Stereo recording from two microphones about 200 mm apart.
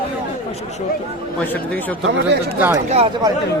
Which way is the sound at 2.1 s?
60° right (ahead or behind).